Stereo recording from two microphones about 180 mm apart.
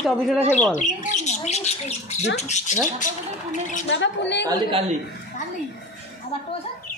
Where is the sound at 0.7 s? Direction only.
45° left (ahead or behind).